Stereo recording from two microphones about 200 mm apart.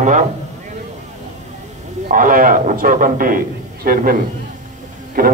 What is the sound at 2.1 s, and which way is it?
A man's voice, 40° right (ahead or behind).